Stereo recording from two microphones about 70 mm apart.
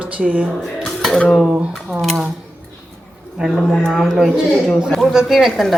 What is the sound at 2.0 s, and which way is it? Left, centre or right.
Speech, centre.